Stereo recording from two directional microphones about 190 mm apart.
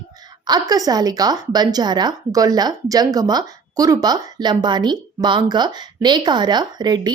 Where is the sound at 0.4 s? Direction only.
20° right (ahead or behind).